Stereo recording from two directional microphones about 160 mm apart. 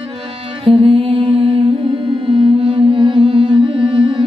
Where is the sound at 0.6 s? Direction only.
35° right (ahead or behind).